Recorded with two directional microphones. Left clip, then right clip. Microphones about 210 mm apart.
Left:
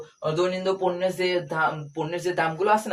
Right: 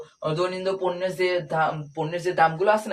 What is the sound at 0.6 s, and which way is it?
Speech, 20° left (ahead or behind).